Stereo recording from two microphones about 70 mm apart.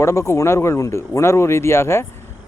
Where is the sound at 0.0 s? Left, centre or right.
Left.